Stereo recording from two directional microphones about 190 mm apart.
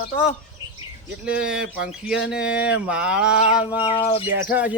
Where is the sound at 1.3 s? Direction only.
5° right (ahead or behind).